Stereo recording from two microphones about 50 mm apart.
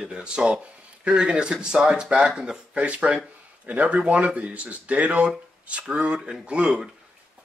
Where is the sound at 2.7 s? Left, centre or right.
Right.